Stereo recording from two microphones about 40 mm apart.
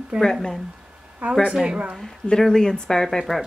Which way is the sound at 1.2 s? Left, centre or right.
Right.